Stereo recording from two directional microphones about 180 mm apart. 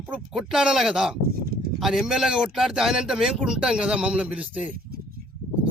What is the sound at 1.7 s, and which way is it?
Speech, centre (ahead or behind).